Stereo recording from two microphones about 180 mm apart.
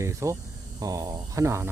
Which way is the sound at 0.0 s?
15° right (ahead or behind).